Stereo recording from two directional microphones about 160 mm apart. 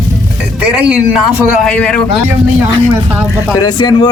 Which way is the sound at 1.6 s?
5° left (ahead or behind).